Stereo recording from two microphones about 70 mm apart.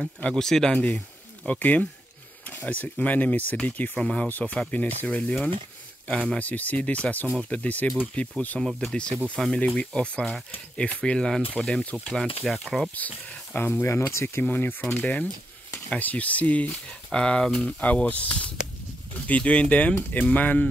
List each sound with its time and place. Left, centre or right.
0.3 s speech: centre
0.7 s speech: left
8.5 s speech: centre
12.1 s speech: centre
12.9 s speech: left
14.4 s speech: left